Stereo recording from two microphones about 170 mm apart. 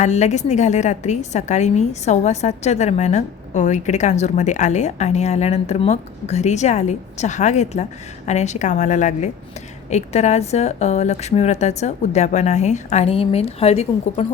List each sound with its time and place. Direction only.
0.0 s a woman's voice: 45° left (ahead or behind)